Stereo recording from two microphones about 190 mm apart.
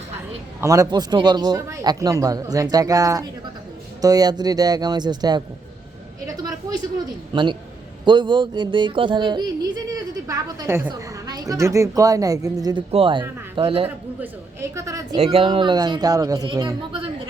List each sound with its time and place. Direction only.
0.6 s yodeling: 15° right (ahead or behind)
6.2 s a sound: 20° right (ahead or behind)
7.3 s yodeling: 25° right (ahead or behind)
13.8 s a man's voice: 10° right (ahead or behind)
15.2 s yodeling: 30° right (ahead or behind)